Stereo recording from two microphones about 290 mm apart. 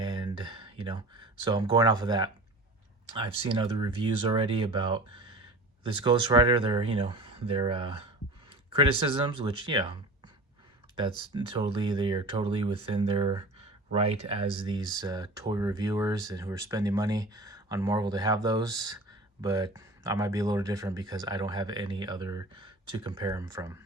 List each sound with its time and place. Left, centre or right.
0.0 s speech: centre
11.3 s speech: centre